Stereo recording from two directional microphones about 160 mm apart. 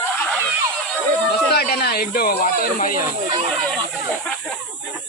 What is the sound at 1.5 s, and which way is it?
Speech, 80° left.